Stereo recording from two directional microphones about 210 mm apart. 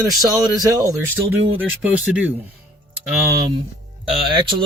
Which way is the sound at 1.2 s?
65° right (ahead or behind).